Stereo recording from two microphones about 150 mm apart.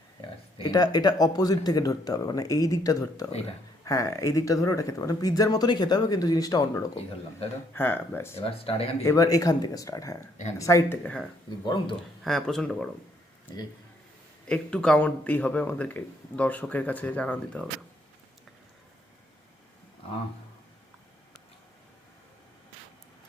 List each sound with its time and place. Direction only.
0.6 s speech: 25° left (ahead or behind)
7.7 s speech: 15° left (ahead or behind)
8.4 s speech: 40° left (ahead or behind)
9.0 s speech: 25° left (ahead or behind)
11.6 s speech: 30° left (ahead or behind)
12.2 s speech: centre (ahead or behind)
14.4 s speech: 5° left (ahead or behind)